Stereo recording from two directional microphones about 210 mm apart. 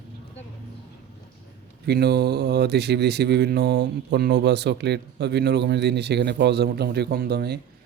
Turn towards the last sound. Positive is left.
turn(degrees=-50)  # may be behind; listen again after turning